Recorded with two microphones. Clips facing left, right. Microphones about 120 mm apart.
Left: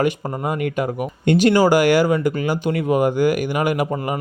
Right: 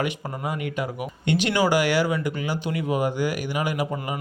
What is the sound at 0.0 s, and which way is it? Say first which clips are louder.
Speech: left 7 dB; 50° left (ahead or behind).